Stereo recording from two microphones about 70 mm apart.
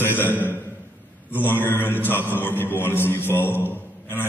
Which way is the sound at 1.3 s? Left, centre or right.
Left.